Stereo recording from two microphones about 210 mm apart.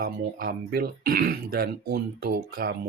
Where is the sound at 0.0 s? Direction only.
45° right (ahead or behind).